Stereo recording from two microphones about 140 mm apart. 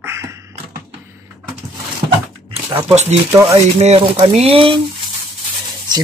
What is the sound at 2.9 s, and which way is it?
Frying, 50° right (ahead or behind).